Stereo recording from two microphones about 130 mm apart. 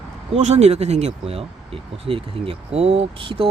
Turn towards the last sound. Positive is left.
turn(degrees=-45)  # may be behind; listen again after turning